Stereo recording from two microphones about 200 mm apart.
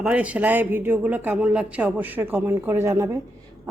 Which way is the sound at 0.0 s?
5° right (ahead or behind).